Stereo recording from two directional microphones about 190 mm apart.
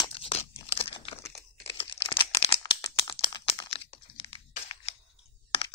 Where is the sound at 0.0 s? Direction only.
30° left (ahead or behind).